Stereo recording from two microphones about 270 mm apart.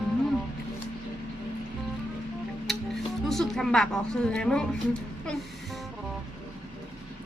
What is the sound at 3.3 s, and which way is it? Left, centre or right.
A woman's voice, centre.